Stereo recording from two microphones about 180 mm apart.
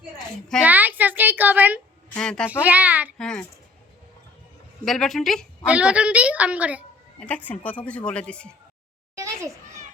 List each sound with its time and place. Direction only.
0.6 s a sound: 10° right (ahead or behind)
2.1 s speech: 5° left (ahead or behind)
2.5 s a woman's voice: 10° right (ahead or behind)
3.2 s speech: 5° left (ahead or behind)
4.9 s a woman's voice: centre (ahead or behind)
7.2 s speech: 5° left (ahead or behind)
9.1 s a sound: 15° right (ahead or behind)